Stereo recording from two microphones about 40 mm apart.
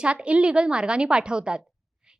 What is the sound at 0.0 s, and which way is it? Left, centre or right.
A woman's voice, right.